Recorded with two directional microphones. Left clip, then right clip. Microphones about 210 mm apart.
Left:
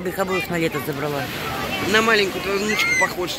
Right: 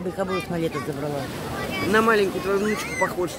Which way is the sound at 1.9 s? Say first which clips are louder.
Left 2 dB; 30° right (ahead or behind).